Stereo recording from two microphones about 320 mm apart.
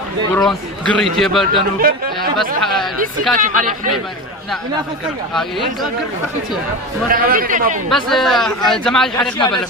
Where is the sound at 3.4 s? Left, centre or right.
Right.